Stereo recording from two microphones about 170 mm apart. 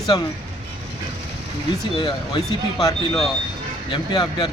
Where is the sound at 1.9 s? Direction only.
30° left (ahead or behind).